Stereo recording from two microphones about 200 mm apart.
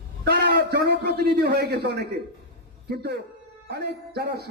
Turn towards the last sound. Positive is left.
turn(degrees=-55)  # may be behind; listen again after turning